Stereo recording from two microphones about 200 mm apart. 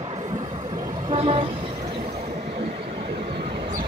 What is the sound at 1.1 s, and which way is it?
Vehicle, 25° right (ahead or behind).